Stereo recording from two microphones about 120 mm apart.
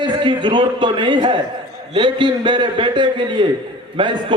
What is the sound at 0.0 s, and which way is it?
A man's voice, 40° right (ahead or behind).